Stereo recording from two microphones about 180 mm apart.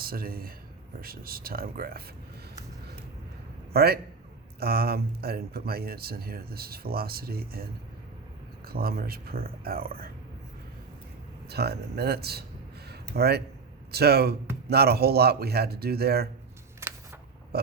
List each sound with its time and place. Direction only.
0.0 s speech: 55° right (ahead or behind)
3.7 s a man's voice: 60° right (ahead or behind)
11.4 s speech: 65° right (ahead or behind)
12.9 s a sound: 65° right (ahead or behind)
13.9 s speech: 65° right (ahead or behind)
17.5 s a sound: 60° right (ahead or behind)